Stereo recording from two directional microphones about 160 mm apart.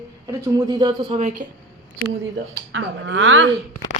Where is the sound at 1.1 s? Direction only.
45° right (ahead or behind).